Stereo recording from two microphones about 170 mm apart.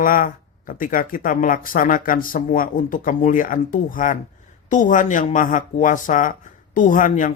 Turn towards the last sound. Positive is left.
turn(degrees=50)  # may be behind; listen again after turning